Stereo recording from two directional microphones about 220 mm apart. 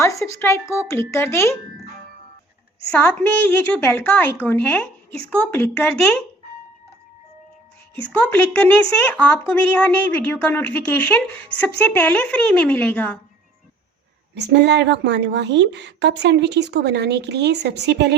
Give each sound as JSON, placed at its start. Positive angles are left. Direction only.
{"t": 0.0, "sound": "a woman's voice", "side_deg": 15}
{"t": 2.9, "sound": "a woman's voice", "side_deg": 5}
{"t": 8.3, "sound": "a woman's voice", "side_deg": 10}
{"t": 14.3, "sound": "a woman's voice", "side_deg": -50}